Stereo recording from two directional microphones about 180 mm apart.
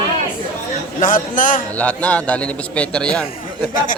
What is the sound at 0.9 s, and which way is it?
Speech, 45° left (ahead or behind).